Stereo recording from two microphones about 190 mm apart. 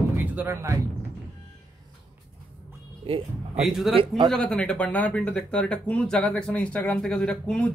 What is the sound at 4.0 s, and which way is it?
Speech, 25° right (ahead or behind).